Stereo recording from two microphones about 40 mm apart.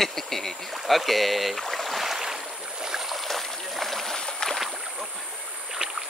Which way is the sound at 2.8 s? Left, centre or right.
Centre.